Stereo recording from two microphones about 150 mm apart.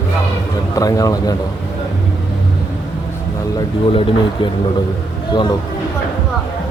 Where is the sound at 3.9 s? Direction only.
35° left (ahead or behind).